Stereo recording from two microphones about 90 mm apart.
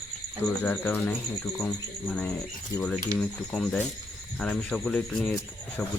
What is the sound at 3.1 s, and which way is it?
Speech, 5° left (ahead or behind).